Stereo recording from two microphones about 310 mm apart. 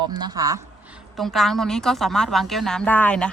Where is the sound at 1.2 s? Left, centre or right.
Centre.